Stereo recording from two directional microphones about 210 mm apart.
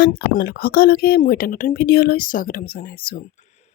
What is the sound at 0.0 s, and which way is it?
A woman's voice, 45° left (ahead or behind).